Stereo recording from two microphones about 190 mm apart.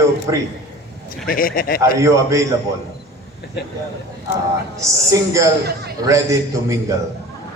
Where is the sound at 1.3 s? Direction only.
50° left (ahead or behind).